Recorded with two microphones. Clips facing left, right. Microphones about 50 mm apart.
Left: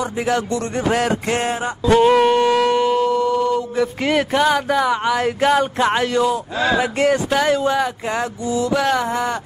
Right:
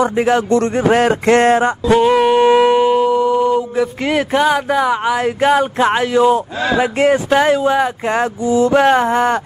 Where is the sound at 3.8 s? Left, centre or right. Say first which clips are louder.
Right 2 dB; centre; by 9.4 s right.